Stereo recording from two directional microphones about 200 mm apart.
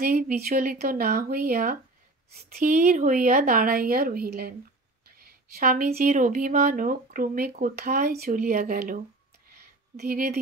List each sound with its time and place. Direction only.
0.0 s speech: 45° right (ahead or behind)